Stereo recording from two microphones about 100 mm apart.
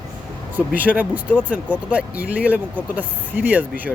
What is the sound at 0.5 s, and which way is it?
Speech, 15° right (ahead or behind).